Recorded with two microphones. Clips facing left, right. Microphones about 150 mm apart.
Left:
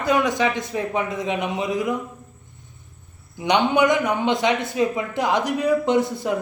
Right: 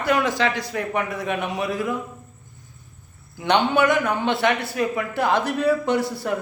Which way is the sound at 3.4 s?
15° left (ahead or behind).